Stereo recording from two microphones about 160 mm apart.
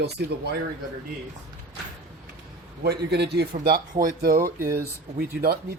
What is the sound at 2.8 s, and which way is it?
A man's voice, 90° right.